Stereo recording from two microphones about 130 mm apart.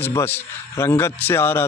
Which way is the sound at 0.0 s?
15° left (ahead or behind).